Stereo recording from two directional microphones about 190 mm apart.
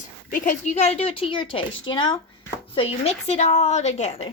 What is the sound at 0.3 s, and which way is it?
A woman's voice, 45° left (ahead or behind).